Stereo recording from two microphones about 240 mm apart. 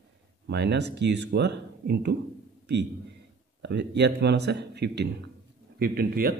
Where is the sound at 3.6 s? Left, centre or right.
Right.